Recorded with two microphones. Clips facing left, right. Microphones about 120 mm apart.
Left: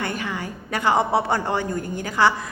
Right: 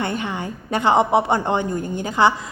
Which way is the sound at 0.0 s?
25° right (ahead or behind).